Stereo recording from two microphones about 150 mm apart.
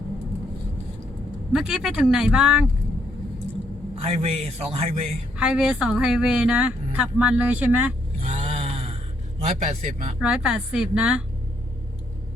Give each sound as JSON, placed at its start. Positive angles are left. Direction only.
{"t": 1.5, "sound": "speech", "side_deg": -5}
{"t": 3.9, "sound": "a man's voice", "side_deg": -40}
{"t": 5.4, "sound": "a woman's voice", "side_deg": -5}
{"t": 8.2, "sound": "a sound", "side_deg": -40}
{"t": 9.4, "sound": "a man's voice", "side_deg": -45}
{"t": 10.2, "sound": "a woman's voice", "side_deg": -5}